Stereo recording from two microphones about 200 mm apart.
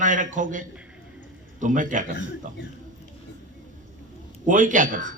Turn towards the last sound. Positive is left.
turn(degrees=-40)  # may be behind; listen again after turning